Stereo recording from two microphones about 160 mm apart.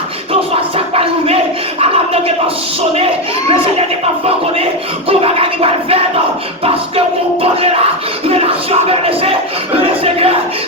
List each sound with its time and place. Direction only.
5.0 s scratching: 35° right (ahead or behind)
8.3 s music: 40° right (ahead or behind)
9.7 s a sound: 35° right (ahead or behind)